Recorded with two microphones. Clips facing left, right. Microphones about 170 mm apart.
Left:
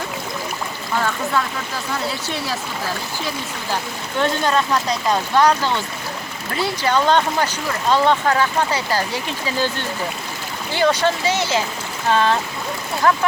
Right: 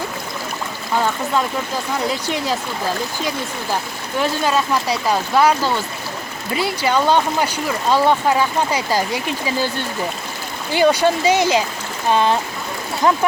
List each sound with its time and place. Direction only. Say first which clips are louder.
4.2 s speech: even; 5° right (ahead or behind)
10.7 s speech: right 3 dB; 15° right (ahead or behind)